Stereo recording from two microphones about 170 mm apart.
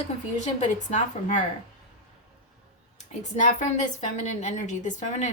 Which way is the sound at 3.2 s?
45° left (ahead or behind).